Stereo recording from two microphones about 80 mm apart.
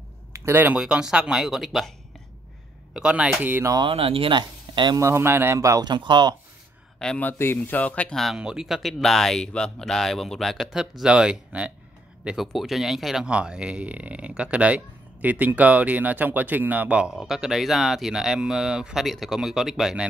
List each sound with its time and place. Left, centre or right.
0.3 s a sound: right
0.7 s speech: centre
2.9 s speech: centre
3.3 s speech: right
3.8 s speech: right
4.9 s speech: right
5.9 s speech: right
7.2 s speech: left
8.4 s speech: centre
17.1 s speech: centre